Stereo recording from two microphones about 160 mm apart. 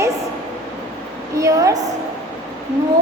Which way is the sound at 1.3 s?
20° right (ahead or behind).